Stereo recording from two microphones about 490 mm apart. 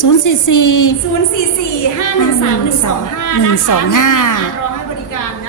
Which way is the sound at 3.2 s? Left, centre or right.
Left.